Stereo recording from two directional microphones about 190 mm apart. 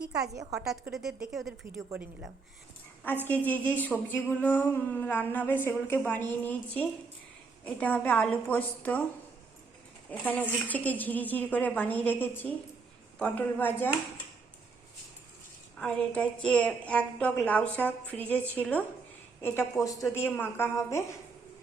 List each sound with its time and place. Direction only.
0.5 s a woman's voice: 5° right (ahead or behind)
3.2 s a woman's voice: 10° left (ahead or behind)
10.1 s a woman's voice: 10° left (ahead or behind)
15.8 s a woman's voice: 5° left (ahead or behind)